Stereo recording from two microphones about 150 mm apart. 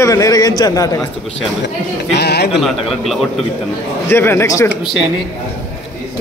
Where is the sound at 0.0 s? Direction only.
20° left (ahead or behind).